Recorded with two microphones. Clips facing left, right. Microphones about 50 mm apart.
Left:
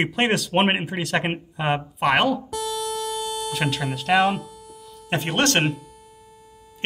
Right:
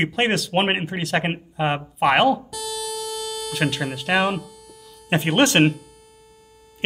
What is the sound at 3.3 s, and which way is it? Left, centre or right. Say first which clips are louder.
Speech: right 5 dB; centre.